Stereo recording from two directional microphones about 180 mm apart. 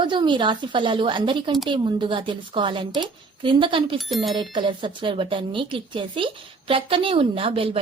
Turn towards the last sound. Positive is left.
turn(degrees=-30)  # may be behind; listen again after turning